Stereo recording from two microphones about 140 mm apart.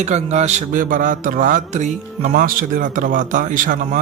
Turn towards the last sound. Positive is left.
turn(degrees=-70)  # may be behind; listen again after turning